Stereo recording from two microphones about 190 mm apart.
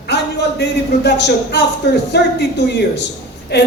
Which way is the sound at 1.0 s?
60° left (ahead or behind).